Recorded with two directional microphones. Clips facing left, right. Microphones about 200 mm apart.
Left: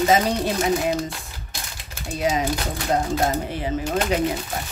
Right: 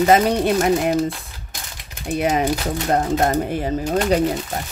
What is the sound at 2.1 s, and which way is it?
Speech, 60° right (ahead or behind).